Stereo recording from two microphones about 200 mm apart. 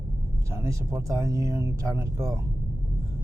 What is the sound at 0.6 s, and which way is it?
Speech, 15° right (ahead or behind).